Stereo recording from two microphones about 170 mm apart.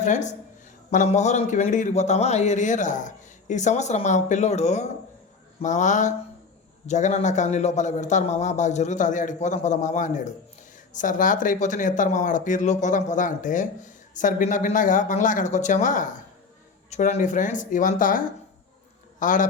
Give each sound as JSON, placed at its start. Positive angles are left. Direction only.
{"t": 0.0, "sound": "speech", "side_deg": 45}
{"t": 19.2, "sound": "speech", "side_deg": 50}